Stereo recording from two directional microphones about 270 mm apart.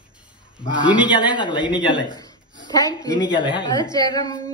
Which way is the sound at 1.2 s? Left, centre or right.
Centre.